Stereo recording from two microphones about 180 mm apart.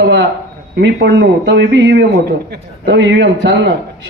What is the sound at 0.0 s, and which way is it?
A man's voice, 75° right (ahead or behind).